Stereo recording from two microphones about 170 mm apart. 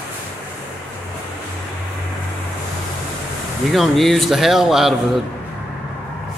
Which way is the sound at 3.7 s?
Centre (ahead or behind).